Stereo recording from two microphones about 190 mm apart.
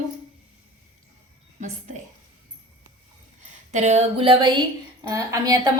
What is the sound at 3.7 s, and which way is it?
Speech, 35° right (ahead or behind).